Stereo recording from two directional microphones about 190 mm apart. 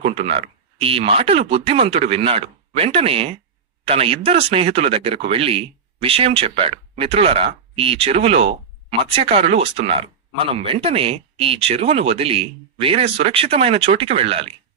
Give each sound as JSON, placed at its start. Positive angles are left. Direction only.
{"t": 0.0, "sound": "speech", "side_deg": -30}